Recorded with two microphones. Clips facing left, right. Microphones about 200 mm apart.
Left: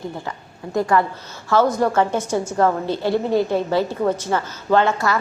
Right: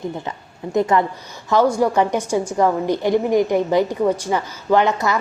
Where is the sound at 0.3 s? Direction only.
20° right (ahead or behind).